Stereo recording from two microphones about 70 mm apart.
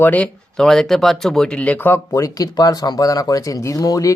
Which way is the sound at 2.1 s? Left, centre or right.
Left.